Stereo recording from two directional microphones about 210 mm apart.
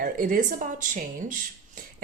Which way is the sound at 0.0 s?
40° right (ahead or behind).